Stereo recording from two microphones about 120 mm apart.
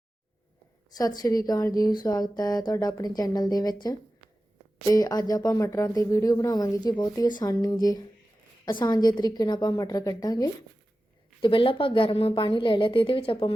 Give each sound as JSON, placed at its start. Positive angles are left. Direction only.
{"t": 0.9, "sound": "speech", "side_deg": 30}
{"t": 11.3, "sound": "a woman's voice", "side_deg": 45}